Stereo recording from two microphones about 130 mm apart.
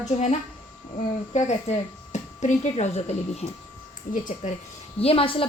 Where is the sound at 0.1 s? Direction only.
65° left (ahead or behind).